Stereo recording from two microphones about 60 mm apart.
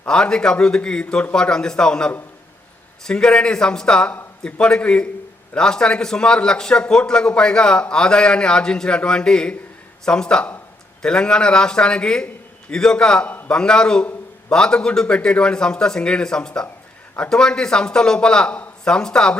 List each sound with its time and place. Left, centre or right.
0.0 s a man's voice: centre